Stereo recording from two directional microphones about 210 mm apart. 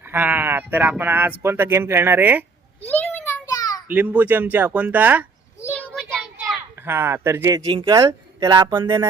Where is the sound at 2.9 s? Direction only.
10° left (ahead or behind).